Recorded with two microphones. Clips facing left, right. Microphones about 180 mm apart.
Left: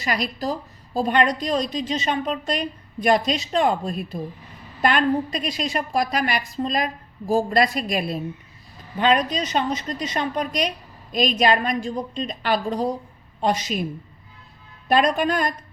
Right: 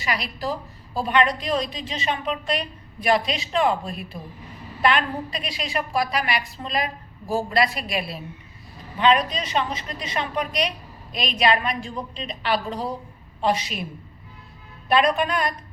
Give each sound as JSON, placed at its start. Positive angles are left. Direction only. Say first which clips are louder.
{"t": 0.0, "sound": "a woman's voice", "louder": "left 3 dB", "side_deg": 40}
{"t": 14.8, "sound": "a woman's voice", "louder": "left 1 dB", "side_deg": 45}